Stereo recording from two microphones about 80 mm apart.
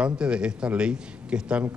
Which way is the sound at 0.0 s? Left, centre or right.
Centre.